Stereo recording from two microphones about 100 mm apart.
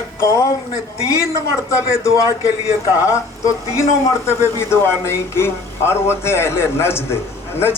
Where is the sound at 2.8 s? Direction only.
30° left (ahead or behind).